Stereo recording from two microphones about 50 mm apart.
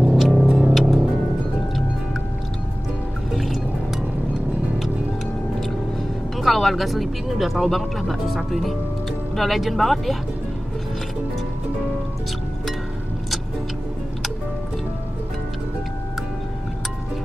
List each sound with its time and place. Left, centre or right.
0.1 s music: centre
3.3 s music: centre
6.3 s speech: centre